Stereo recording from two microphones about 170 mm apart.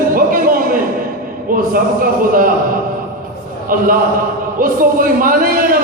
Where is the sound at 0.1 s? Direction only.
55° right (ahead or behind).